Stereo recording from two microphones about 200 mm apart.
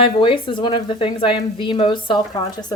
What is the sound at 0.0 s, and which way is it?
Speech, 25° left (ahead or behind).